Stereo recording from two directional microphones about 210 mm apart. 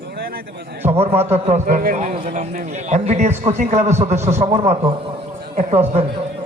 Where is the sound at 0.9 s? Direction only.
30° right (ahead or behind).